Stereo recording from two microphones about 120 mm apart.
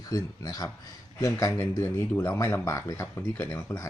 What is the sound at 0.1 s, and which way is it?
Speech, 30° left (ahead or behind).